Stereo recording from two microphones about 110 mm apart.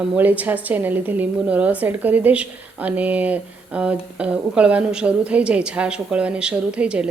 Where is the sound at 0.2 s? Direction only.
15° right (ahead or behind).